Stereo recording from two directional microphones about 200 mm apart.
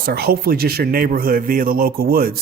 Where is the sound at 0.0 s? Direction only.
50° right (ahead or behind).